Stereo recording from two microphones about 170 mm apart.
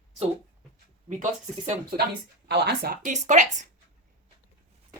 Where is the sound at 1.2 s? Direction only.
45° right (ahead or behind).